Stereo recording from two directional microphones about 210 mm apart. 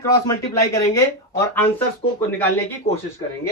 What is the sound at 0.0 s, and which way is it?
Speech, 15° left (ahead or behind).